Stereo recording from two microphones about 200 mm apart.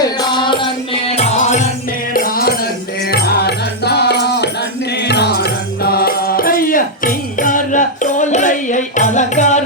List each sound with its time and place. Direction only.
0.2 s music: 25° left (ahead or behind)